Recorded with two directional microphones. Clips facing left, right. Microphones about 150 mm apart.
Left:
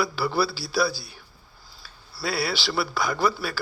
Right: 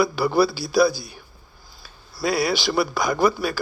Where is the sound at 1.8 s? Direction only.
15° right (ahead or behind).